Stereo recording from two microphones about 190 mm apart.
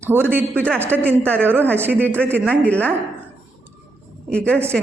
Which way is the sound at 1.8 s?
10° right (ahead or behind).